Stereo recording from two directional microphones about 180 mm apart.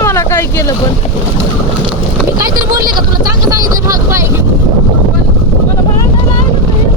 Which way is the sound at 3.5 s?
20° right (ahead or behind).